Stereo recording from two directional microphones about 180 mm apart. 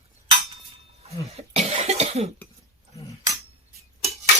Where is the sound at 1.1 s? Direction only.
35° right (ahead or behind).